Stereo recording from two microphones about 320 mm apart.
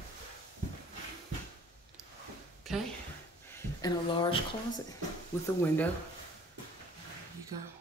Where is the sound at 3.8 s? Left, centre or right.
Centre.